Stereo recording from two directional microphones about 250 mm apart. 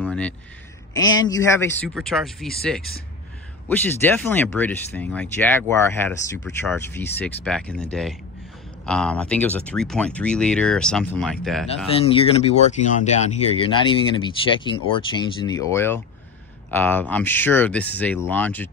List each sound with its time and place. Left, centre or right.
0.0 s a sound: centre
1.2 s speech: centre
3.6 s speech: centre
12.0 s speech: left; by 18.7 s centre